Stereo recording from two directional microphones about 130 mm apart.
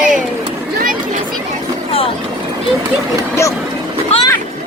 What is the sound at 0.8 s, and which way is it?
Chatter, 90° right.